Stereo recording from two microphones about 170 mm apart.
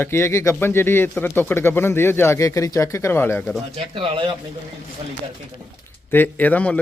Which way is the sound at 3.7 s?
30° right (ahead or behind).